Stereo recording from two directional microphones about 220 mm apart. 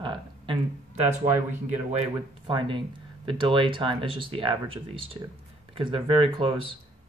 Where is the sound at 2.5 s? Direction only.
20° right (ahead or behind).